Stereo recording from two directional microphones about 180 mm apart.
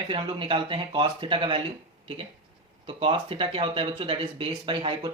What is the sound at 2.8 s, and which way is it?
Speech, 30° right (ahead or behind).